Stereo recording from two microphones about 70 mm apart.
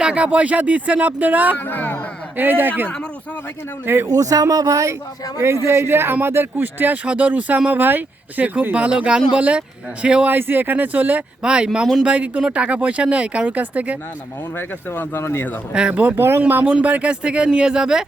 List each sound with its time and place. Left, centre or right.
0.0 s speech: centre
1.6 s speech: left
2.3 s speech: right
4.0 s speech: right
5.6 s speech: right; by 10.3 s centre
10.3 s speech: right
14.5 s speech: left
15.7 s speech: centre
16.1 s speech: right; by 18.0 s centre